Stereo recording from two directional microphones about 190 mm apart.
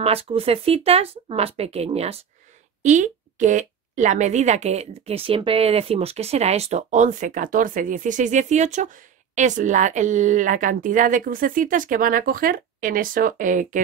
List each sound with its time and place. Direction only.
0.0 s a woman's voice: 30° right (ahead or behind)